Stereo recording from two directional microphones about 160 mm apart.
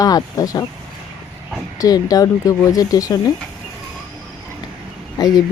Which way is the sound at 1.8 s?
20° left (ahead or behind).